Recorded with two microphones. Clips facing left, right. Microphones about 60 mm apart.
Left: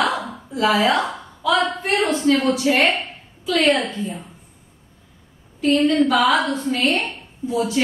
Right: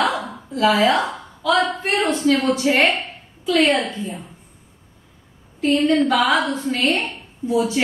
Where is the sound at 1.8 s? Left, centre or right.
Centre.